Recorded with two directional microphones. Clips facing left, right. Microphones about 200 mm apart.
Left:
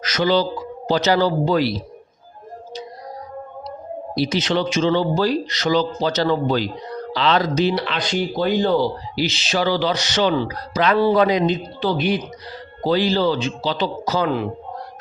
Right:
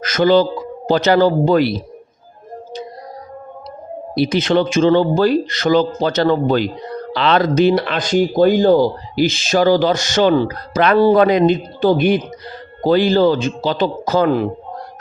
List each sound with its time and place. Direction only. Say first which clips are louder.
0.0 s speech: right 6 dB; 50° right (ahead or behind)
4.1 s speech: right 5 dB; 55° right (ahead or behind)